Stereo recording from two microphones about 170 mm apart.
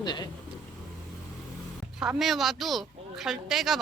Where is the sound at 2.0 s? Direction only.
Centre (ahead or behind).